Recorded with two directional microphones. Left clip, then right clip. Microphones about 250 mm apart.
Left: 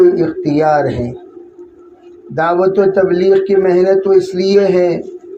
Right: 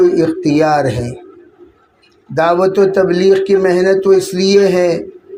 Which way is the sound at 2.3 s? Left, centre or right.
Right.